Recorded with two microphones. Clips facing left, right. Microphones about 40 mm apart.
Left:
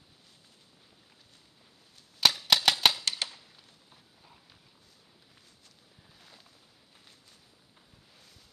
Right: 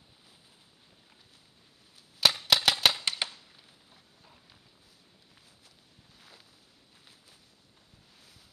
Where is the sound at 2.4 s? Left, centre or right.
Centre.